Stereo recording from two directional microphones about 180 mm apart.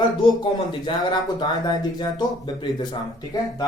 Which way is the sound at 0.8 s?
25° left (ahead or behind).